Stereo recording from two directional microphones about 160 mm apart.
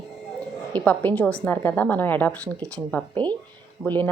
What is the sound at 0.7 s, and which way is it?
A woman's voice, 10° left (ahead or behind).